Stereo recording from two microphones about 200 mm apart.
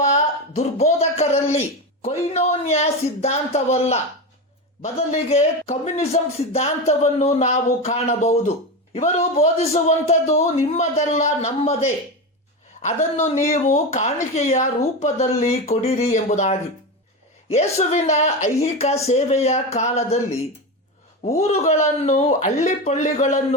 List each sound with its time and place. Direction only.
0.5 s speech: 35° left (ahead or behind)
12.8 s speech: 35° left (ahead or behind)
21.4 s speech: 35° left (ahead or behind)